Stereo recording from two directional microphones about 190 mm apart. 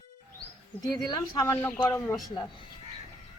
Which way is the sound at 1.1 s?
20° left (ahead or behind).